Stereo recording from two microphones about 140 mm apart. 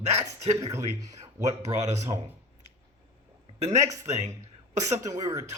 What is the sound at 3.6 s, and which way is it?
Speech, 55° right (ahead or behind).